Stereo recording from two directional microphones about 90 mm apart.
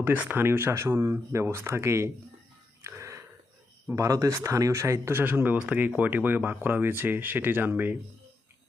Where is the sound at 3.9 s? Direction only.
35° right (ahead or behind); by 8.0 s 20° right (ahead or behind).